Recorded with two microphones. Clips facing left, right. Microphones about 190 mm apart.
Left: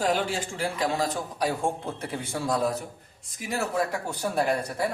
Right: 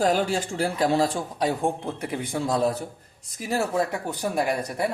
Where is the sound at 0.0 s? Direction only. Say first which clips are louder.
Right 4 dB; 40° right (ahead or behind); by 4.9 s 15° right (ahead or behind).